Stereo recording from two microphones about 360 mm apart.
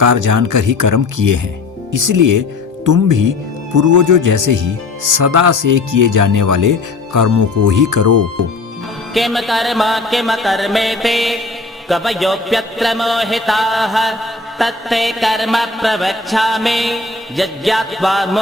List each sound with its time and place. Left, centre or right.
0.0 s speech: right
9.1 s mantra: centre